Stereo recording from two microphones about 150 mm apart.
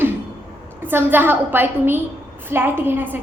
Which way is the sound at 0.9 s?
15° right (ahead or behind).